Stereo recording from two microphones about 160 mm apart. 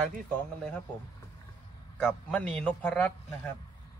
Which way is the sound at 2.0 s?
10° left (ahead or behind).